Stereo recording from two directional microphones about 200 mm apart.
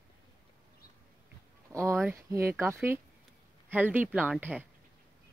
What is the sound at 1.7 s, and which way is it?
Speech, 15° right (ahead or behind).